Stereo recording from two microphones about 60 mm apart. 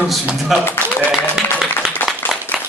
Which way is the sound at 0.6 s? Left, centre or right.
Left.